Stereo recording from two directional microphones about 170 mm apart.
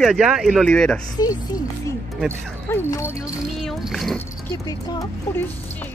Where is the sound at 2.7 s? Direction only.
15° left (ahead or behind).